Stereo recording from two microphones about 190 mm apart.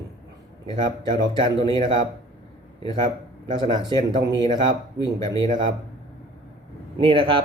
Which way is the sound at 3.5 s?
25° right (ahead or behind).